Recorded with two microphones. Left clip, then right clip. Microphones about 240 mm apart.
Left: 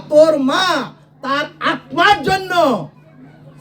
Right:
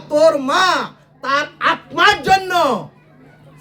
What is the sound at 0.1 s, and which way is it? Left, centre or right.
A child's voice, centre.